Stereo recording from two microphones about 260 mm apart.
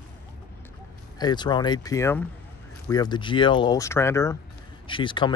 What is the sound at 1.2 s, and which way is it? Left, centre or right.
Speech, centre.